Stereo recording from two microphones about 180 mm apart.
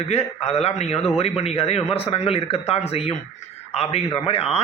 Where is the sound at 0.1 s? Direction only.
35° left (ahead or behind).